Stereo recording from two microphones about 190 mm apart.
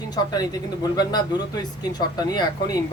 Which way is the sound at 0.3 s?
20° left (ahead or behind).